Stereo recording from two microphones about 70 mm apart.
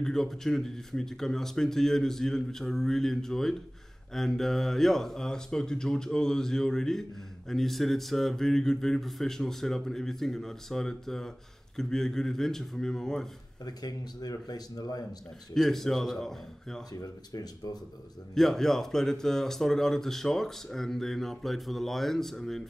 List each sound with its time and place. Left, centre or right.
0.0 s speech: centre
13.7 s speech: left
15.5 s speech: centre
16.9 s speech: left
18.3 s speech: centre